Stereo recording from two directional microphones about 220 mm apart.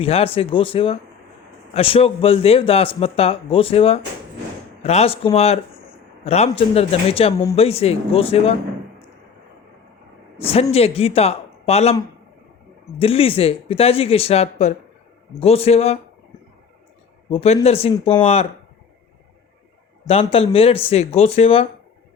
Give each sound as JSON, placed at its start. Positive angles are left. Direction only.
{"t": 0.0, "sound": "speech", "side_deg": 25}
{"t": 10.3, "sound": "speech", "side_deg": 25}
{"t": 13.0, "sound": "speech", "side_deg": 25}
{"t": 17.2, "sound": "speech", "side_deg": 25}
{"t": 20.1, "sound": "speech", "side_deg": 25}